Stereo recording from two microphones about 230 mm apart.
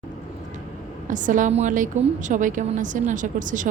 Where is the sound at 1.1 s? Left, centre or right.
Right.